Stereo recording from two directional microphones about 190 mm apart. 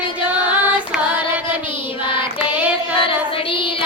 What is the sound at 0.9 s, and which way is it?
Music, 5° right (ahead or behind).